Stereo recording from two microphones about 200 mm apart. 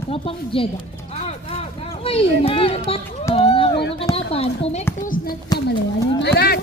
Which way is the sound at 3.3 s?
30° left (ahead or behind).